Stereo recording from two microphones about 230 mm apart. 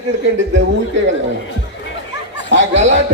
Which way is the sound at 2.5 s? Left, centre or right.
Right.